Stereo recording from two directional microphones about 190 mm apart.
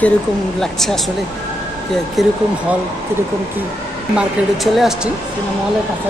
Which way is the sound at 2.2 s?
Centre (ahead or behind).